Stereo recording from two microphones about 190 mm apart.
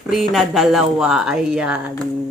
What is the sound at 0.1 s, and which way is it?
Speech, centre (ahead or behind).